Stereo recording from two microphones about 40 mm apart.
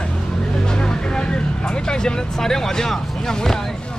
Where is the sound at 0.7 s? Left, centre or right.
Left.